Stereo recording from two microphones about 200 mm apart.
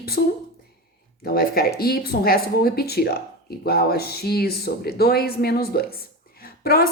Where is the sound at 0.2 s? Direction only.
50° left (ahead or behind).